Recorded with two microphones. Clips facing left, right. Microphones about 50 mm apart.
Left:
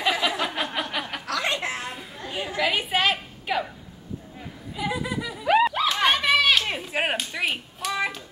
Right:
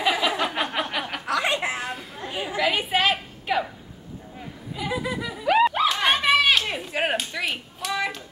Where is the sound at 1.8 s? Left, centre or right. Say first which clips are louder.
Right 3 dB; centre.